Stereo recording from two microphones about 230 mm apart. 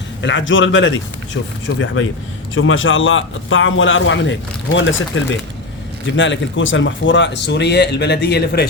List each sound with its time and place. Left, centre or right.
0.2 s a man's voice: left